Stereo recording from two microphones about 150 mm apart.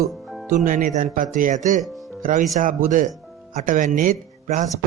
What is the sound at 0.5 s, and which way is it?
A man's voice, 65° right (ahead or behind).